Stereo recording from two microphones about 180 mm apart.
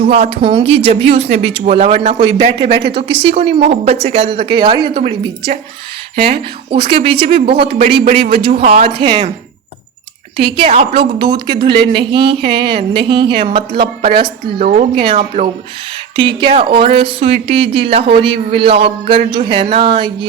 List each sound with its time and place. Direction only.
0.0 s speech: 35° right (ahead or behind)
6.3 s speech: 30° right (ahead or behind)
10.3 s speech: 30° right (ahead or behind)
14.6 s speech: 45° right (ahead or behind)
14.9 s speech: 35° right (ahead or behind)
16.1 s speech: 30° right (ahead or behind)